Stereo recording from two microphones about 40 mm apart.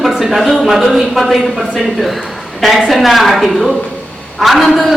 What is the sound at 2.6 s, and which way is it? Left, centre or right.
A man's voice, centre.